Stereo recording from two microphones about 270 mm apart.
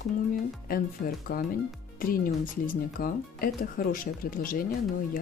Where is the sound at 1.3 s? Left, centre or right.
Left.